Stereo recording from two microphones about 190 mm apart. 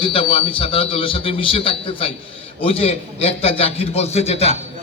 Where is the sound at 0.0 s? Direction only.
30° left (ahead or behind).